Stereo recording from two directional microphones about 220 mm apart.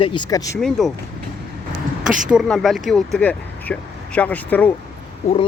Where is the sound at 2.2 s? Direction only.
Centre (ahead or behind).